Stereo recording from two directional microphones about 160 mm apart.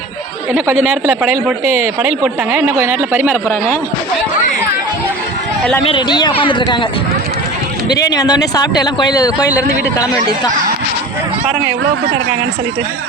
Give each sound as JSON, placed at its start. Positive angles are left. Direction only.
{"t": 0.9, "sound": "speech", "side_deg": -10}
{"t": 5.8, "sound": "speech", "side_deg": 30}
{"t": 8.0, "sound": "speech", "side_deg": 20}